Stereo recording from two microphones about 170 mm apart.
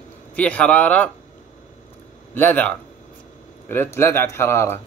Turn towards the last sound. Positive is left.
turn(degrees=15)  # may be behind; listen again after turning